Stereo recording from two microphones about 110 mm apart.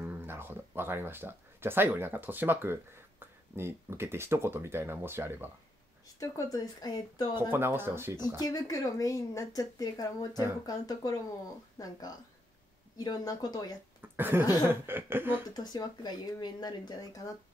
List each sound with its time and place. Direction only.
0.0 s speech: 20° right (ahead or behind)
6.1 s speech: 30° left (ahead or behind)
7.3 s speech: 20° right (ahead or behind)
8.4 s speech: 35° left (ahead or behind)
14.0 s speech: 20° right (ahead or behind)
15.5 s speech: 40° left (ahead or behind)